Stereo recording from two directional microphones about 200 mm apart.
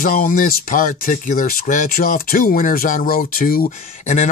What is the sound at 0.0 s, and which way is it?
Speech, 45° left (ahead or behind).